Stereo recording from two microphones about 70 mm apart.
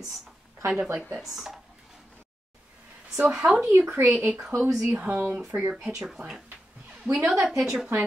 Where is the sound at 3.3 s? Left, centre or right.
Centre.